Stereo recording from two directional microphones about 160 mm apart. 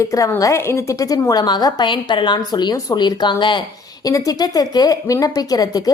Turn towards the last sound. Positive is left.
turn(degrees=25)  # may be behind; listen again after turning